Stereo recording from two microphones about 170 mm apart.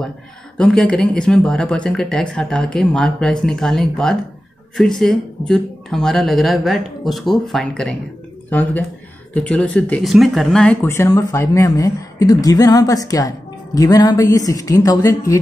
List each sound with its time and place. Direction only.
0.6 s speech: 5° left (ahead or behind); by 15.3 s 20° left (ahead or behind)